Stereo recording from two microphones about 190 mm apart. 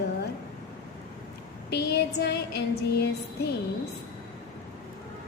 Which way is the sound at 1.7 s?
60° left (ahead or behind).